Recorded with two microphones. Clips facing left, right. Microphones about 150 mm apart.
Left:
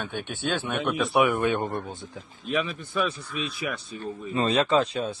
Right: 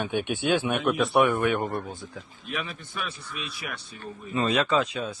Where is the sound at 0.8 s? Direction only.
Centre (ahead or behind).